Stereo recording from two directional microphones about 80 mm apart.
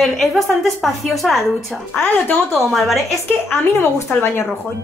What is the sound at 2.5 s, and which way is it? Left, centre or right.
Speech, centre.